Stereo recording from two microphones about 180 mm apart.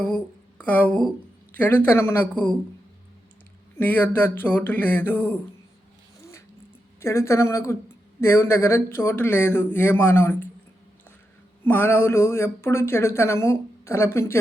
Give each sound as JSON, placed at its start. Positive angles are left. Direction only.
{"t": 0.0, "sound": "speech", "side_deg": 10}
{"t": 3.8, "sound": "speech", "side_deg": 10}
{"t": 7.0, "sound": "speech", "side_deg": 15}
{"t": 11.6, "sound": "speech", "side_deg": 10}